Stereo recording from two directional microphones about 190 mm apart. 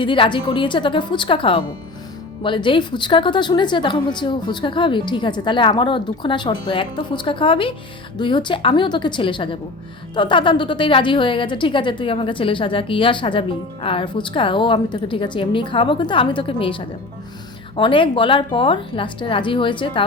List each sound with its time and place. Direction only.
0.0 s a woman's voice: 25° left (ahead or behind)